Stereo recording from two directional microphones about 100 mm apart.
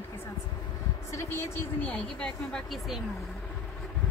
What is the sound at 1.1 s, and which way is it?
Speech, 25° left (ahead or behind).